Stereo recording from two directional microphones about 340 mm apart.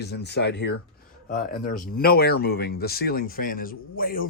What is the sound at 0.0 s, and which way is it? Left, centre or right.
A man's voice, left.